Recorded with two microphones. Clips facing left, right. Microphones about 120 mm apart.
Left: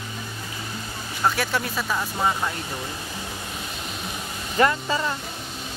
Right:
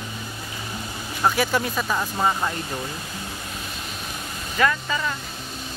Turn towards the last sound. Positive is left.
turn(degrees=30)  # may be behind; listen again after turning